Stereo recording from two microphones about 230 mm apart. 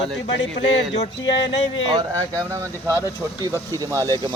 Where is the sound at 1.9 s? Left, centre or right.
Centre.